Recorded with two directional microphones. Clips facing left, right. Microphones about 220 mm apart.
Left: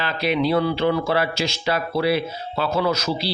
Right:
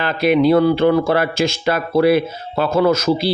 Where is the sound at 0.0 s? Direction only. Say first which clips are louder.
Right 7 dB; 50° right (ahead or behind).